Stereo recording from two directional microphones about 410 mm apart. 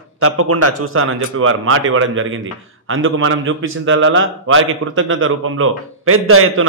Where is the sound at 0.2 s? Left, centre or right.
Right.